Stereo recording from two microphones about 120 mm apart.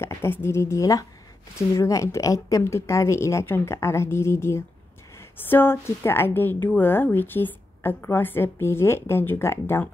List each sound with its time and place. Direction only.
0.0 s a woman's voice: 20° left (ahead or behind)